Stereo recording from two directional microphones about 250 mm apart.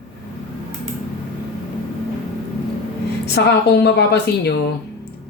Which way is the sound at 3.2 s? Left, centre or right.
Left.